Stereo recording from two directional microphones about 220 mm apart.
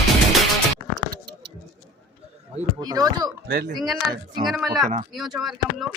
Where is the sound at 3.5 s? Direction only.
45° right (ahead or behind).